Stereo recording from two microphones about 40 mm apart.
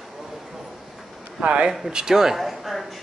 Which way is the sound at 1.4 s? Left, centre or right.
Right.